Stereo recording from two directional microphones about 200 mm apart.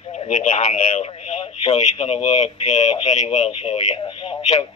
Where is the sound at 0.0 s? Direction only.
25° left (ahead or behind).